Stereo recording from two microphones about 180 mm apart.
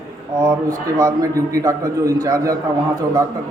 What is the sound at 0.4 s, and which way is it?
A man's voice, 20° right (ahead or behind).